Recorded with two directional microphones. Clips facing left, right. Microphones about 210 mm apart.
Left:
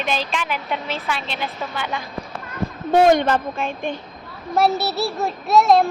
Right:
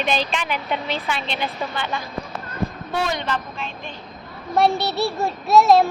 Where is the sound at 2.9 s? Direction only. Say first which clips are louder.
Left 12 dB; 50° left (ahead or behind).